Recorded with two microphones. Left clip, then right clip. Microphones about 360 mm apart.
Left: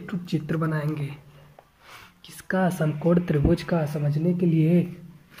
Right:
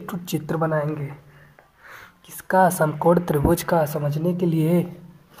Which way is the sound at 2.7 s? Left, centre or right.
Right.